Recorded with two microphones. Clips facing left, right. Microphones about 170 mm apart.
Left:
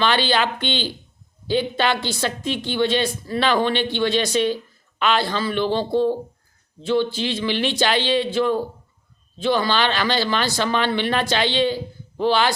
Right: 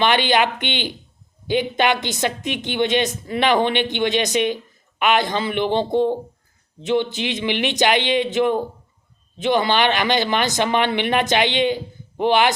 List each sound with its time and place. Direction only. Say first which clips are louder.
0.0 s a woman's voice: right 2 dB; 15° right (ahead or behind)